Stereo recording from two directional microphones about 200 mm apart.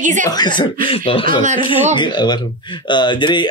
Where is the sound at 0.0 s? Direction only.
40° right (ahead or behind).